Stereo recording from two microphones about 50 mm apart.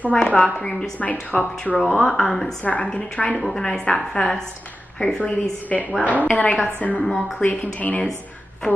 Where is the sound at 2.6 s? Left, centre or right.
Left.